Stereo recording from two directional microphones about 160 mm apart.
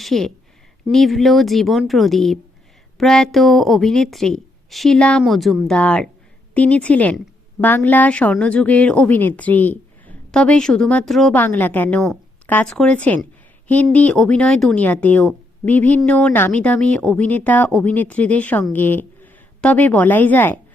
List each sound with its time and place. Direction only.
0.0 s a woman's voice: centre (ahead or behind)